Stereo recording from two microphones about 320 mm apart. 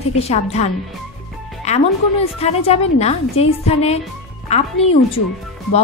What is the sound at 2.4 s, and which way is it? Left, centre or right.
A woman's voice, centre.